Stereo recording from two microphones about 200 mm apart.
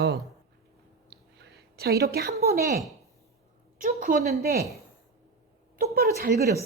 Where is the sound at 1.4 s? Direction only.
55° right (ahead or behind).